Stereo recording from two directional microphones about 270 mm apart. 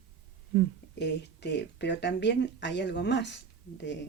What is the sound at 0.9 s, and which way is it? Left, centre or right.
Speech, left.